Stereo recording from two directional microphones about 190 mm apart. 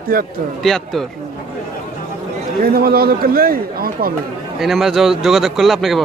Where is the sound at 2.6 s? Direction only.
50° right (ahead or behind).